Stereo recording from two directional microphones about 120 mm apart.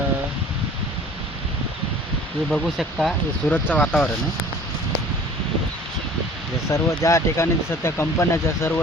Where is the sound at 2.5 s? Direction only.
Centre (ahead or behind).